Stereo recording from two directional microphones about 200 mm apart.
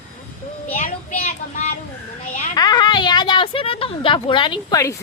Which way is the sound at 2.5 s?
20° left (ahead or behind).